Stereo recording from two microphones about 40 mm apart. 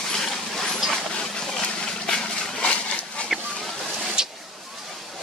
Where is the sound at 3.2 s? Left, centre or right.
Centre.